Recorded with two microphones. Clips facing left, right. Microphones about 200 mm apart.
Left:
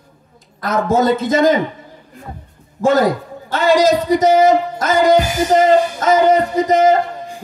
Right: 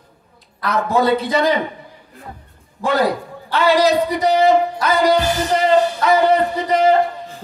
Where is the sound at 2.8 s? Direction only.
45° left (ahead or behind).